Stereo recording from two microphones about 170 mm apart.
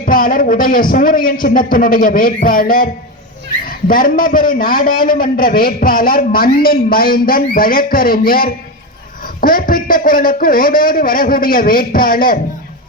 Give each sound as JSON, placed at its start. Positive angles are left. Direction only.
{"t": 0.0, "sound": "a man's voice", "side_deg": 55}